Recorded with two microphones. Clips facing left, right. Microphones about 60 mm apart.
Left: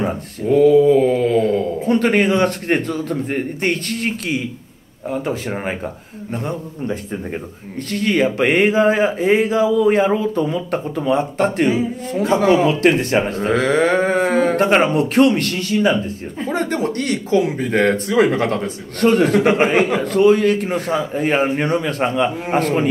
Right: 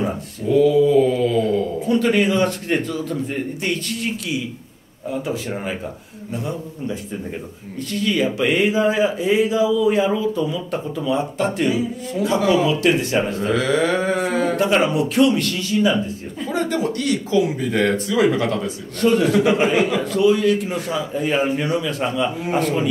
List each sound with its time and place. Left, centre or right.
0.0 s mantra: left
5.1 s speech: left
7.9 s speech: left